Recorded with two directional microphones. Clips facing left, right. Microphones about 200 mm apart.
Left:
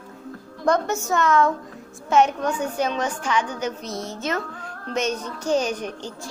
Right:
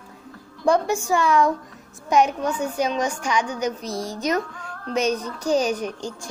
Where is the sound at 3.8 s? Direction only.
35° right (ahead or behind).